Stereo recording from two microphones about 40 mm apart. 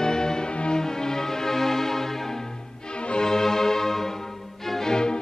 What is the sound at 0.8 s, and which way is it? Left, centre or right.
Music, centre.